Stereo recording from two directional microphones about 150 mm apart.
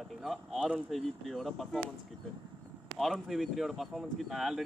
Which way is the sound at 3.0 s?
Centre (ahead or behind).